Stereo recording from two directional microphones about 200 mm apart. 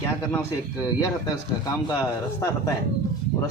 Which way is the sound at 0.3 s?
15° left (ahead or behind).